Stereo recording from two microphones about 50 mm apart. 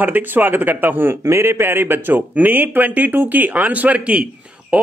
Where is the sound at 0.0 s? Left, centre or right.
Right.